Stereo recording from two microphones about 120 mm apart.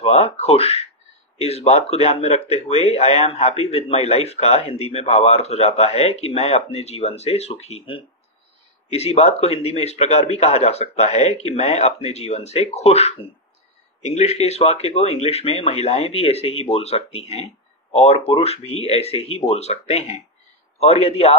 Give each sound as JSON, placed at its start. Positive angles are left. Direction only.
{"t": 0.0, "sound": "speech", "side_deg": 60}